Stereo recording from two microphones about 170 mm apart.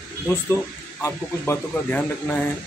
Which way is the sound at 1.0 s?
10° left (ahead or behind).